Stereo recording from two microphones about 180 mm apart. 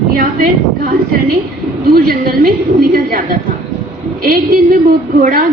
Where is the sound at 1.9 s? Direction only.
55° right (ahead or behind).